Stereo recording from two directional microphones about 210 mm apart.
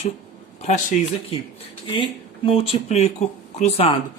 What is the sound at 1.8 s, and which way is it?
A man's voice, 25° left (ahead or behind).